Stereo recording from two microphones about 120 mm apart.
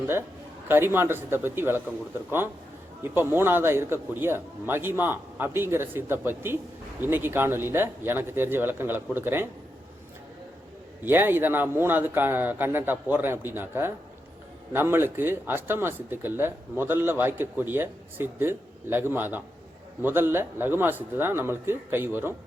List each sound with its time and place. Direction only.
0.7 s speech: 20° right (ahead or behind)
3.0 s speech: 20° right (ahead or behind)
11.0 s speech: 15° right (ahead or behind)